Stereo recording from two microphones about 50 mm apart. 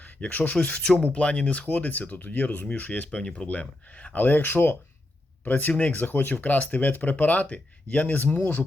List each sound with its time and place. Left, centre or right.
0.2 s speech: left
0.5 s speech: left
3.1 s speech: centre; by 8.6 s left